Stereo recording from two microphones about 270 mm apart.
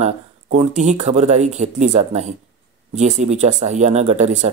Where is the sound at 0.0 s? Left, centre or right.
Right.